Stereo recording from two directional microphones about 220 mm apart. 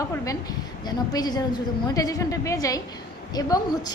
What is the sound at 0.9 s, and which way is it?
A woman's voice, 20° left (ahead or behind).